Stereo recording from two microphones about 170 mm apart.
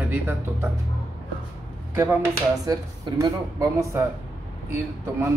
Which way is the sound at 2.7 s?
20° right (ahead or behind).